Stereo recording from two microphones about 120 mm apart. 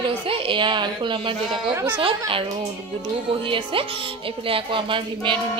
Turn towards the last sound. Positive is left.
turn(degrees=-45)  # may be behind; listen again after turning